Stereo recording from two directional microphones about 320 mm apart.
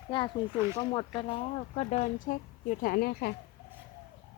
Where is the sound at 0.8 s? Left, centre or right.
Centre.